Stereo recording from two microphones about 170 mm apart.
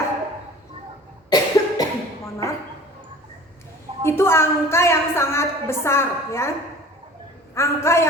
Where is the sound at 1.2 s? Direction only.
25° left (ahead or behind).